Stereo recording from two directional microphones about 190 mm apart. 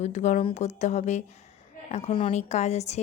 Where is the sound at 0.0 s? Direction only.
40° left (ahead or behind).